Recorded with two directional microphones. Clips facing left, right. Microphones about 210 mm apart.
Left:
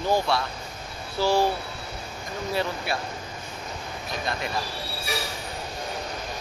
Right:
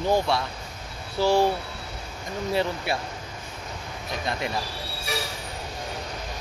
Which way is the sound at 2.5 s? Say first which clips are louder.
Right 2 dB; 25° right (ahead or behind).